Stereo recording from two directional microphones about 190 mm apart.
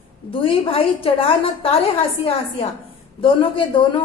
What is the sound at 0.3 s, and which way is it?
A woman's voice, 30° left (ahead or behind).